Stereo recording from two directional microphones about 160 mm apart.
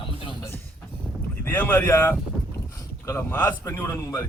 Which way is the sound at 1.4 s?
10° left (ahead or behind).